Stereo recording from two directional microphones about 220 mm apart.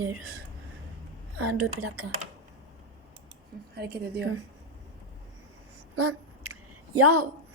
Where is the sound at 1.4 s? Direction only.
85° right.